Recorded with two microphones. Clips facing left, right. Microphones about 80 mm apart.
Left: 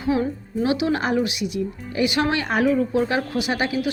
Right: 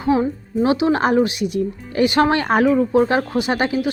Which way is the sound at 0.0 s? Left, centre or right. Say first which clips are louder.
Right 4 dB; right.